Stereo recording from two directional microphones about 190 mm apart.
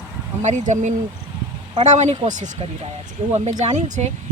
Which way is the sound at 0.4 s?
40° right (ahead or behind).